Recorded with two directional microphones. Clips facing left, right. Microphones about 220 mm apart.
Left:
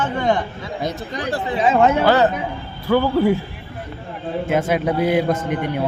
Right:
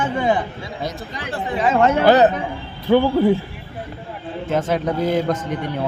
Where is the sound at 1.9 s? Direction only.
20° right (ahead or behind).